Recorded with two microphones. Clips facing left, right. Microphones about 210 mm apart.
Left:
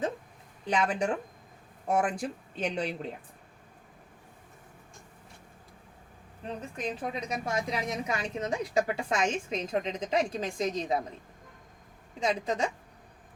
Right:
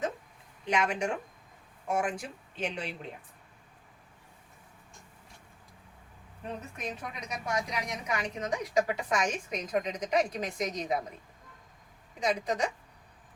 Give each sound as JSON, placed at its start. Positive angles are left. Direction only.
{"t": 0.7, "sound": "speech", "side_deg": 35}
{"t": 6.7, "sound": "a woman's voice", "side_deg": 30}
{"t": 12.2, "sound": "a woman's voice", "side_deg": 25}